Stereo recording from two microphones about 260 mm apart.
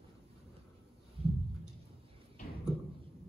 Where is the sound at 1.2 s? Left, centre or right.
Right.